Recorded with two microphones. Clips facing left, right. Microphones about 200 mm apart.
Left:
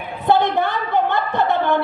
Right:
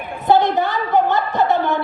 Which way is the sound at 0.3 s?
55° left (ahead or behind).